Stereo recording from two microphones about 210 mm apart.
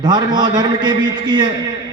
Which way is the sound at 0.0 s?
20° right (ahead or behind).